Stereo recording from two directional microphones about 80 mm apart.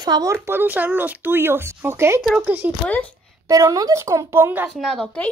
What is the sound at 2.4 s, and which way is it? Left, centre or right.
Speech, right.